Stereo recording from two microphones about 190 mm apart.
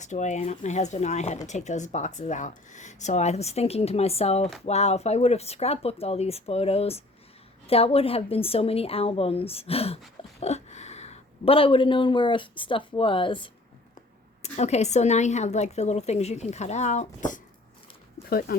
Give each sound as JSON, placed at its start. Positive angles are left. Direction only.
{"t": 0.0, "sound": "speech", "side_deg": 40}
{"t": 18.3, "sound": "speech", "side_deg": 50}